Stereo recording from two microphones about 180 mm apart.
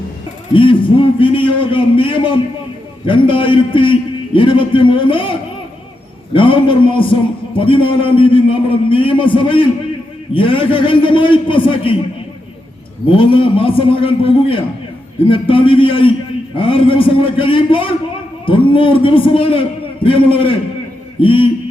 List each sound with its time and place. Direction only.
0.5 s a man's voice: 30° left (ahead or behind)
13.1 s a man's voice: 30° left (ahead or behind)